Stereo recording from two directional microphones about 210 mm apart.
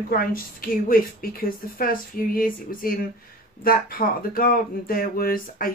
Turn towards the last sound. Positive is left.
turn(degrees=45)  # may be behind; listen again after turning